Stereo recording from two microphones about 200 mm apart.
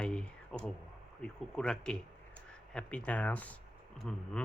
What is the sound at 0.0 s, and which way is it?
Clicking, 5° left (ahead or behind).